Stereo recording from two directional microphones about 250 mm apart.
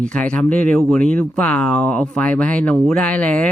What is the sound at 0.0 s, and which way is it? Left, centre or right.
Speech, centre.